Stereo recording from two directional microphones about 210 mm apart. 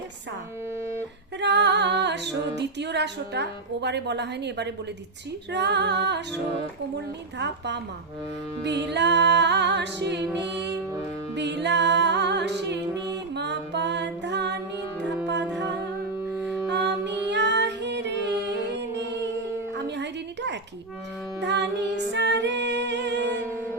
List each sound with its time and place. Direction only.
1.4 s a capella: 55° right (ahead or behind)
5.5 s music: 55° right (ahead or behind)
16.4 s music: 5° right (ahead or behind)
16.6 s music: 55° right (ahead or behind)
19.7 s a sound: 55° right (ahead or behind)
21.4 s music: 55° right (ahead or behind)